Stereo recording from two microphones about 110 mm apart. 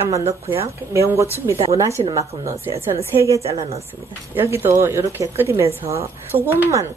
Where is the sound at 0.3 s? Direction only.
25° right (ahead or behind).